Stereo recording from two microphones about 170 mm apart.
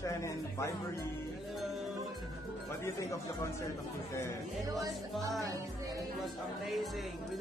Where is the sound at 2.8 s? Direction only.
20° left (ahead or behind).